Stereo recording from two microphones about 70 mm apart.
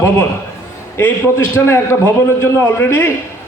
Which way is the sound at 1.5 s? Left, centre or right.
Left.